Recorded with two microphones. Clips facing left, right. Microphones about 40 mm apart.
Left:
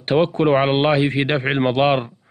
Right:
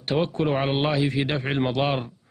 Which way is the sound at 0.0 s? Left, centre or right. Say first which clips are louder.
Left 7 dB; left.